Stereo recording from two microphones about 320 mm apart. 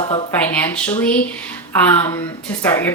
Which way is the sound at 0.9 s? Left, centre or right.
Centre.